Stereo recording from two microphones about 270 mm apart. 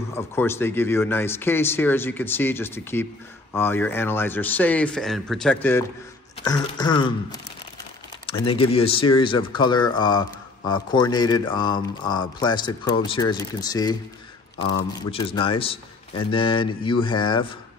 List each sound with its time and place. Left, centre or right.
0.1 s speech: centre
8.3 s a man's voice: left